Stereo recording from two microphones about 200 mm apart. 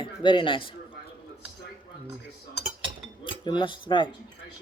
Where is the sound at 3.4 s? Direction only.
25° left (ahead or behind).